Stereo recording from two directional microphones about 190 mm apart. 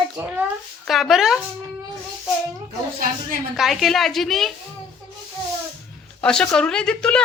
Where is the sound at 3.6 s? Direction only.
Centre (ahead or behind).